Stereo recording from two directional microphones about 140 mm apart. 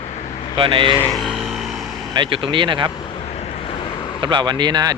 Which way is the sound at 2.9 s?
35° left (ahead or behind).